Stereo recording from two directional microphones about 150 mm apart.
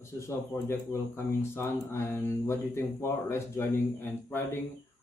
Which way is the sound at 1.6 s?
15° left (ahead or behind).